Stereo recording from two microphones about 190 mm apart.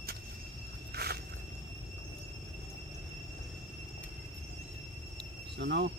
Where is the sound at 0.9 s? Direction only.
55° right (ahead or behind).